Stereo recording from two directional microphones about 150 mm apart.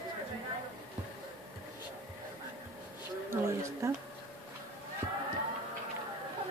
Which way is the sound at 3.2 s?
20° right (ahead or behind).